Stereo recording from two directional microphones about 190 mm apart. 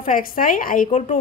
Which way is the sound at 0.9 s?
35° left (ahead or behind).